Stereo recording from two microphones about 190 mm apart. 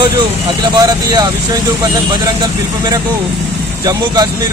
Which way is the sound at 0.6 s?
20° right (ahead or behind).